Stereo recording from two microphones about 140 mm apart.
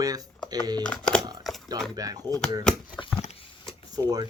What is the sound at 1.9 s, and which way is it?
Speech, 25° right (ahead or behind).